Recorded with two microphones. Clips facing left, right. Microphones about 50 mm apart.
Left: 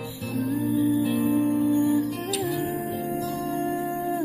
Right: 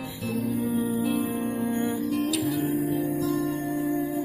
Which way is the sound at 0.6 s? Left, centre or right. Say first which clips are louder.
Left 6 dB; right.